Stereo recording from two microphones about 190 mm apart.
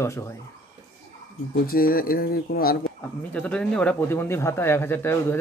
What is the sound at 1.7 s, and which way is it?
Speech, 50° left (ahead or behind).